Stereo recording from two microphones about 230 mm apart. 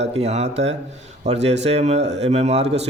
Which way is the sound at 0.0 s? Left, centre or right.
Right.